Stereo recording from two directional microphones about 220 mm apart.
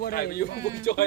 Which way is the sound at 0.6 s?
15° right (ahead or behind).